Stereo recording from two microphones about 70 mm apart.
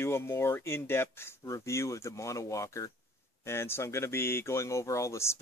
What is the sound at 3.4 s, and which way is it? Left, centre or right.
Speech, left.